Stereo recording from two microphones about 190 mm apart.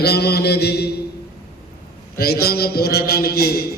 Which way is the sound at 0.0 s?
60° left (ahead or behind).